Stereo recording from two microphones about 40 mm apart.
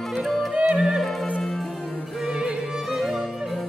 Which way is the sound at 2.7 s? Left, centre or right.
Centre.